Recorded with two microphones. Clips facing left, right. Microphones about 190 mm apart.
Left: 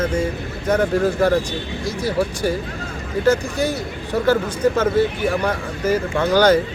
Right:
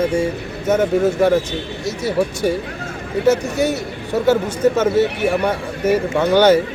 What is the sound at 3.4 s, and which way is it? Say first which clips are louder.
Speech: right 3 dB; 25° right (ahead or behind).